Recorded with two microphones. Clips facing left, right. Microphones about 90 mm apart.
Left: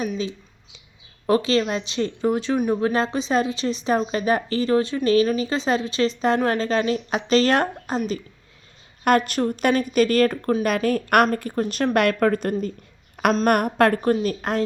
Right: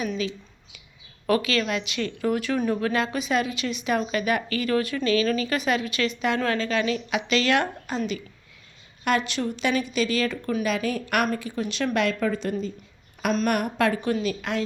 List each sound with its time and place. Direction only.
1.3 s a woman's voice: 30° left (ahead or behind)